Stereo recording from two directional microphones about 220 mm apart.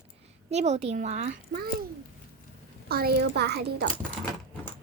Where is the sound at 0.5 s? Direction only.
30° right (ahead or behind).